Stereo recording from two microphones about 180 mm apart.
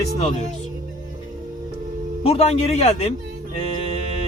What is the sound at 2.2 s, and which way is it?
Speech, 35° left (ahead or behind).